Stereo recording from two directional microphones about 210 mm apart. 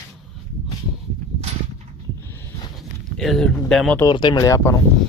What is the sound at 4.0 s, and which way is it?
Speech, 20° left (ahead or behind).